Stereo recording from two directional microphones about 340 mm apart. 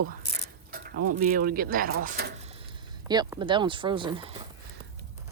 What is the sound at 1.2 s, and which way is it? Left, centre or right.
Speech, right.